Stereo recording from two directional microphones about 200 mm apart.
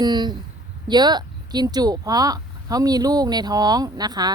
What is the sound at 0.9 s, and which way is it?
Speech, 20° right (ahead or behind).